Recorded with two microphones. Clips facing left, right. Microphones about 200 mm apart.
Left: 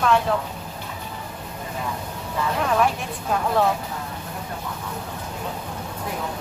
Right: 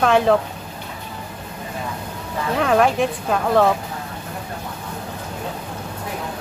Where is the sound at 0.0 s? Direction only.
80° right.